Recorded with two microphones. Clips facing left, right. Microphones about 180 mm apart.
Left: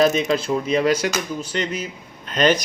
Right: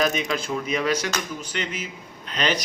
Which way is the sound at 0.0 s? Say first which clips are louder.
Left 6 dB; 30° left (ahead or behind).